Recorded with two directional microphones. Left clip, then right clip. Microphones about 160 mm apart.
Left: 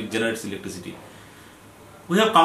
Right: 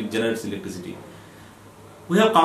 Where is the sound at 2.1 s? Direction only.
5° right (ahead or behind).